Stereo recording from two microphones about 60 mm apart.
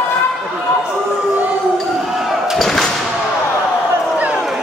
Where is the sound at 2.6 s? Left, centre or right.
Centre.